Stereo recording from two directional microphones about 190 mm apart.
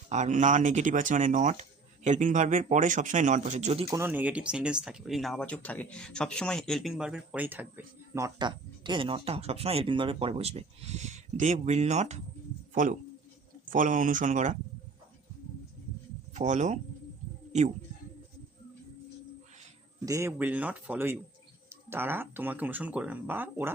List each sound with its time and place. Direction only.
0.1 s speech: 40° right (ahead or behind)
3.8 s speech: 15° right (ahead or behind); by 14.5 s 40° right (ahead or behind)
16.3 s speech: 40° right (ahead or behind)
20.1 s speech: 15° right (ahead or behind)